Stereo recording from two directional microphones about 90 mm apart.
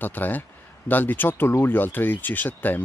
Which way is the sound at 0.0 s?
20° left (ahead or behind).